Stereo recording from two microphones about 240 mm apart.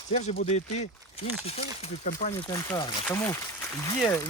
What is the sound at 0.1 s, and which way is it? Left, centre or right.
Speech, left.